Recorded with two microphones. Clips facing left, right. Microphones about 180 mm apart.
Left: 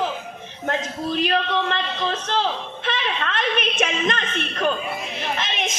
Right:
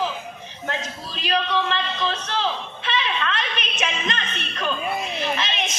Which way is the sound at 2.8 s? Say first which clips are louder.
Right 1 dB; 50° left (ahead or behind).